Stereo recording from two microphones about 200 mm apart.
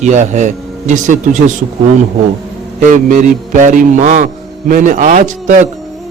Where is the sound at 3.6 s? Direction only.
40° right (ahead or behind).